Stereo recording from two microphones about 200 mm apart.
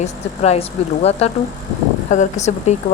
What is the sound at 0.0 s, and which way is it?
Speech, 30° left (ahead or behind).